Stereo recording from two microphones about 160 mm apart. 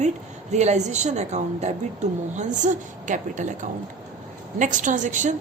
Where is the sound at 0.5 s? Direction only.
45° right (ahead or behind).